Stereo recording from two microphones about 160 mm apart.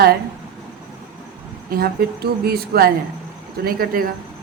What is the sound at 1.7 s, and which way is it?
Speech, 70° right (ahead or behind).